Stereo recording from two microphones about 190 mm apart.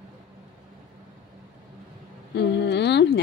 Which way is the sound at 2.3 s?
65° left (ahead or behind).